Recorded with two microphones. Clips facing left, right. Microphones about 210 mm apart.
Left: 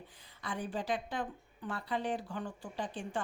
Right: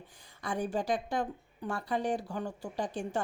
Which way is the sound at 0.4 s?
45° right (ahead or behind).